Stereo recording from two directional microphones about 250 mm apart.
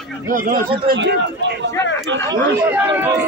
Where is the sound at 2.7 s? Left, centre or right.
Centre.